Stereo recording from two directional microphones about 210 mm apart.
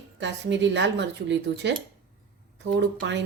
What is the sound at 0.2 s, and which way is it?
Speech, 55° right (ahead or behind).